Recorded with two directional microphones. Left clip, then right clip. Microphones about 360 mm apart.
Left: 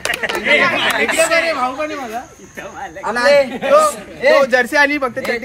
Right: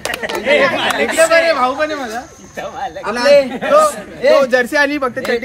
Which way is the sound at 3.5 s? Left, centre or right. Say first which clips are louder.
Right 1 dB; centre.